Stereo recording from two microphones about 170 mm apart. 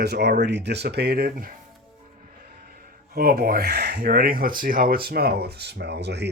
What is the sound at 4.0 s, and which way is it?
Speech, 60° right (ahead or behind).